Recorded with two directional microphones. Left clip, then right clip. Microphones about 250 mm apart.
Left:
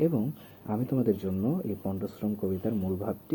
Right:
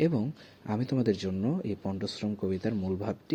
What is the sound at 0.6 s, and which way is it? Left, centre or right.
Speech, right.